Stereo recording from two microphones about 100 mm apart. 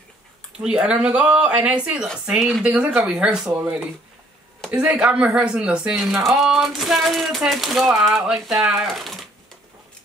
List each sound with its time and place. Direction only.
0.6 s speech: 10° right (ahead or behind)